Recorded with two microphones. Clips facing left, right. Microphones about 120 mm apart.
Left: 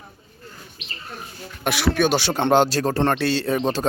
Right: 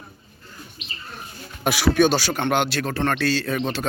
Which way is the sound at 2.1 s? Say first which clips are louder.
Left 4 dB; 25° left (ahead or behind).